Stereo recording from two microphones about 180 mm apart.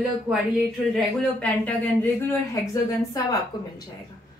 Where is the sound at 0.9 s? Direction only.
10° left (ahead or behind).